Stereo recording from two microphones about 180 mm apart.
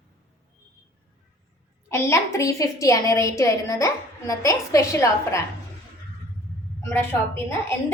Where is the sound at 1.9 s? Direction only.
15° left (ahead or behind).